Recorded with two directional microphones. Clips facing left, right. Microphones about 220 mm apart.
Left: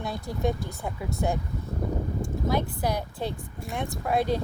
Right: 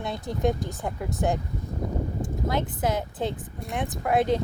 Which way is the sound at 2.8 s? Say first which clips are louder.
Right 2 dB; 20° right (ahead or behind).